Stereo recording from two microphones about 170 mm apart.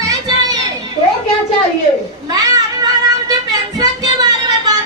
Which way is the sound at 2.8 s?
20° right (ahead or behind).